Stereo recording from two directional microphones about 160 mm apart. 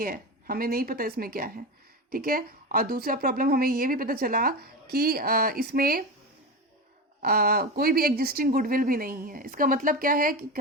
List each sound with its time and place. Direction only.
0.0 s speech: 65° right (ahead or behind)
7.2 s speech: 70° right (ahead or behind)